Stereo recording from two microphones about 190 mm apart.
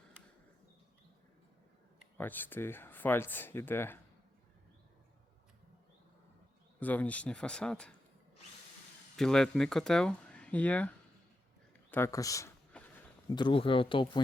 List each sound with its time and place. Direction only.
2.1 s speech: 10° left (ahead or behind)
6.7 s speech: 10° left (ahead or behind)
9.1 s speech: 5° left (ahead or behind); by 14.2 s 25° left (ahead or behind)